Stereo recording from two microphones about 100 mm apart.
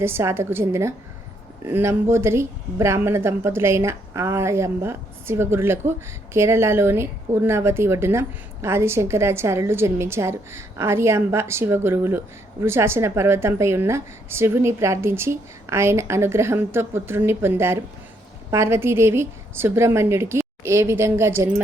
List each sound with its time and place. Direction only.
0.0 s speech: 25° right (ahead or behind)